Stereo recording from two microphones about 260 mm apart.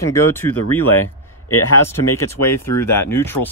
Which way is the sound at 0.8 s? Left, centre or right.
Left.